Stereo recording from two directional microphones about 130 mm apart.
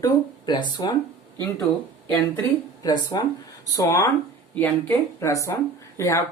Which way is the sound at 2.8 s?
30° left (ahead or behind).